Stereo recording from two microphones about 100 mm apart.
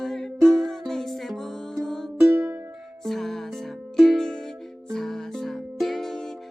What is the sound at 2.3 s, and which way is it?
Music, 25° right (ahead or behind).